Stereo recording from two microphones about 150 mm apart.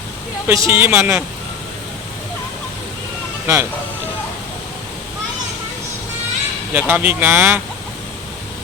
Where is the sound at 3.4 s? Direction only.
15° right (ahead or behind).